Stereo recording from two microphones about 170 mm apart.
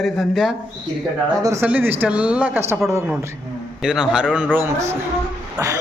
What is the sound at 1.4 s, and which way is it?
A man's voice, 15° right (ahead or behind).